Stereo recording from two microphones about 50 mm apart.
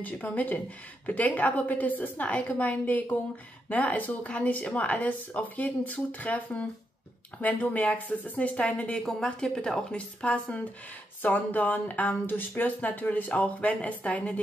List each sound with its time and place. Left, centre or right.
0.0 s speech: left
9.0 s speech: centre
11.2 s speech: left